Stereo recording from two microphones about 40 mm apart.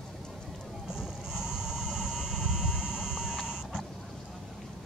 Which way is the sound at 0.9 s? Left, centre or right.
Centre.